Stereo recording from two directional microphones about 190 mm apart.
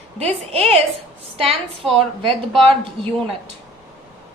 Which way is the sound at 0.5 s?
35° right (ahead or behind).